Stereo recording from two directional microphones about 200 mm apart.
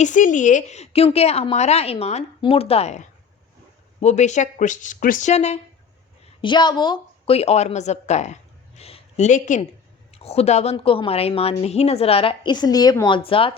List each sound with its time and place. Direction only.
0.0 s a woman's voice: 40° left (ahead or behind)
6.4 s a woman's voice: 20° left (ahead or behind)